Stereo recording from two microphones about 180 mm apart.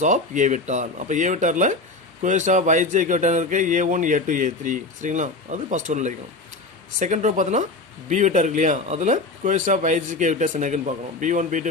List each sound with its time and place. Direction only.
0.0 s speech: 45° right (ahead or behind)